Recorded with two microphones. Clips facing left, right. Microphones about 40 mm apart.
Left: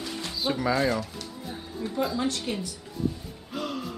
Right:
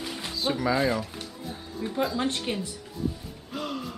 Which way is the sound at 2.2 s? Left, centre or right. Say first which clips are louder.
Even; right.